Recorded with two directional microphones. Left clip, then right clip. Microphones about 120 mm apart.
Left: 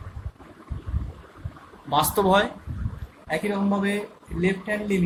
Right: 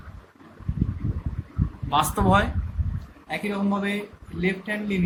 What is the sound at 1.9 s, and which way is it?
Speech, 55° left (ahead or behind).